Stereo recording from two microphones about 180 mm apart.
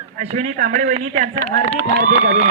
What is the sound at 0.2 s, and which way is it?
A man's voice, 45° right (ahead or behind).